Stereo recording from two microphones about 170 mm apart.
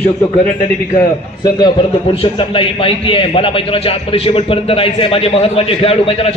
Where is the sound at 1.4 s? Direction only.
25° left (ahead or behind).